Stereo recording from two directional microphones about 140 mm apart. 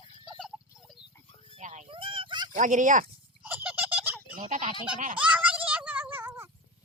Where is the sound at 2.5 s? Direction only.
65° right (ahead or behind).